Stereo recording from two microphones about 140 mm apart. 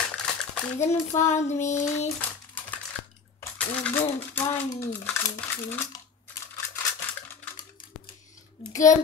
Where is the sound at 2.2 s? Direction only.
10° left (ahead or behind).